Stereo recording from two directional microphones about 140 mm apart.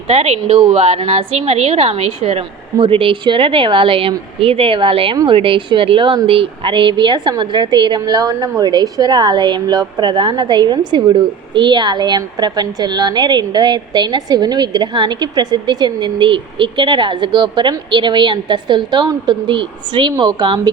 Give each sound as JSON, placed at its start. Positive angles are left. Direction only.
{"t": 0.1, "sound": "a woman's voice", "side_deg": -50}
{"t": 2.7, "sound": "speech", "side_deg": -40}